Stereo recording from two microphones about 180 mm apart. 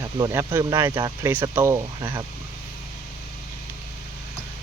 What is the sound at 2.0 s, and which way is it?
Speech, 25° right (ahead or behind).